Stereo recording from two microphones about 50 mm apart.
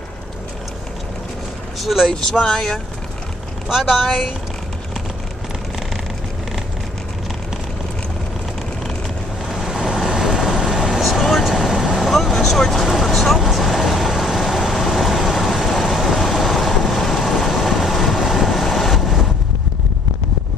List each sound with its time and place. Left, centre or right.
1.8 s speech: centre
2.4 s speech: centre
3.6 s speech: centre
9.5 s vehicle: centre
12.1 s vehicle: centre